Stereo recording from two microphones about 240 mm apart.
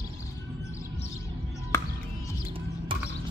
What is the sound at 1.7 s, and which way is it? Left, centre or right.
Music, centre.